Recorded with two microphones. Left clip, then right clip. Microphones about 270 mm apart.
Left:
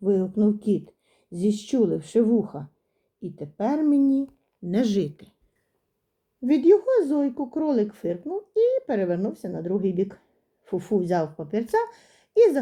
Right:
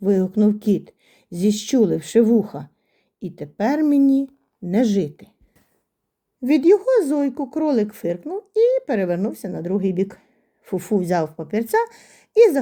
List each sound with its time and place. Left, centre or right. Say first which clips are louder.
0.0 s speech: right 4 dB; right
6.4 s speech: right 3 dB; right